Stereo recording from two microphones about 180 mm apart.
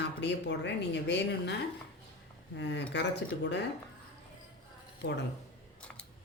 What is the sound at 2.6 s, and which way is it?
Speech, 75° left (ahead or behind).